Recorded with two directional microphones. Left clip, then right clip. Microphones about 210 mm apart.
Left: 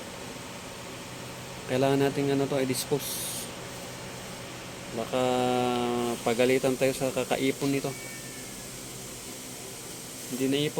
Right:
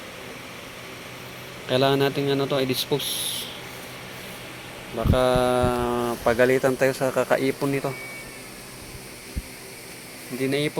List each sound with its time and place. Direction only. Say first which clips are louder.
1.7 s speech: right 5 dB; 15° right (ahead or behind)
4.9 s speech: right 6 dB; 15° right (ahead or behind)